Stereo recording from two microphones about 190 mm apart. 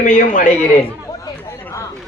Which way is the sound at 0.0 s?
40° left (ahead or behind).